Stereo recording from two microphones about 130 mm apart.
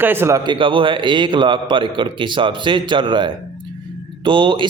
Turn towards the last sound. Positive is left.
turn(degrees=-40)  # may be behind; listen again after turning